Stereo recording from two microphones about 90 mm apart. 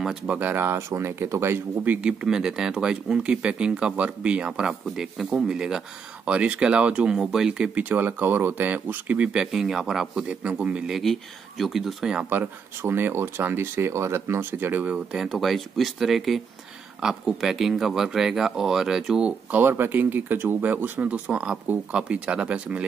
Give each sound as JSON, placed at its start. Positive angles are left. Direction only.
{"t": 0.3, "sound": "speech", "side_deg": -20}
{"t": 2.0, "sound": "speech", "side_deg": -10}
{"t": 10.9, "sound": "speech", "side_deg": 0}
{"t": 12.3, "sound": "speech", "side_deg": -25}
{"t": 15.1, "sound": "speech", "side_deg": -5}
{"t": 19.5, "sound": "speech", "side_deg": -25}